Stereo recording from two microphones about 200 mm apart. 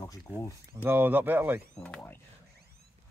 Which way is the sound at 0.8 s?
10° right (ahead or behind).